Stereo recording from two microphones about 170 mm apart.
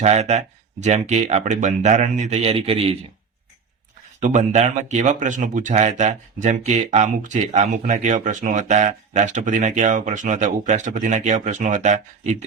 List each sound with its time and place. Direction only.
0.0 s speech: 40° right (ahead or behind)
4.2 s speech: 45° right (ahead or behind)